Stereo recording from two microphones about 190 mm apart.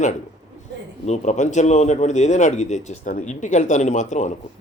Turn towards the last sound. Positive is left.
turn(degrees=40)  # may be behind; listen again after turning